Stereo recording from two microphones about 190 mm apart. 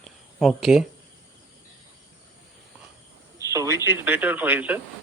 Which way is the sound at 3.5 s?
15° right (ahead or behind).